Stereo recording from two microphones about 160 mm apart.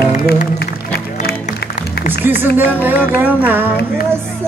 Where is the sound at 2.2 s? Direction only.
10° right (ahead or behind).